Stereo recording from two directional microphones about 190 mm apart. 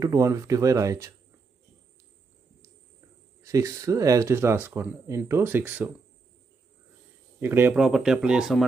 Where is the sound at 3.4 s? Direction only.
15° right (ahead or behind).